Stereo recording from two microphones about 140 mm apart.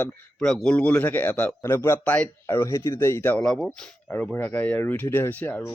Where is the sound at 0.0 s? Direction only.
5° left (ahead or behind).